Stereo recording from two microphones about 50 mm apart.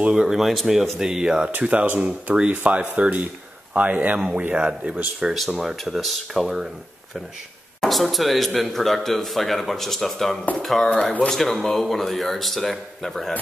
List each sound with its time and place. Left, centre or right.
0.1 s speech: centre
1.6 s speech: right
5.6 s a man's voice: centre
7.9 s a man's voice: centre